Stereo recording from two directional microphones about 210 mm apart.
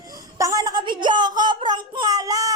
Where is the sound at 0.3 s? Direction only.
15° right (ahead or behind).